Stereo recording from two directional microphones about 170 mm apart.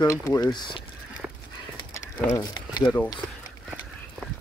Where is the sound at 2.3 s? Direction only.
25° left (ahead or behind).